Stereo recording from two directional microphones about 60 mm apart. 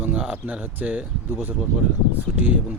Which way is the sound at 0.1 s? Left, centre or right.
Centre.